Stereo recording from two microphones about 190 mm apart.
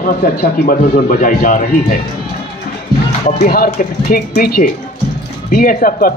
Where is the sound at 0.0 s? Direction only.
50° left (ahead or behind).